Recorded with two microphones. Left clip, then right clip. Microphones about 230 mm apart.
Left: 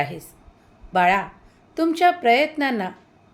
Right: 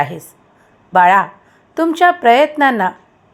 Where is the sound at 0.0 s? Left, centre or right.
Centre.